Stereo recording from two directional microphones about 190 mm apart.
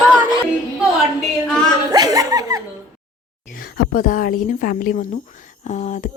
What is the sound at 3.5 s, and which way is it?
A woman's voice, 50° left (ahead or behind).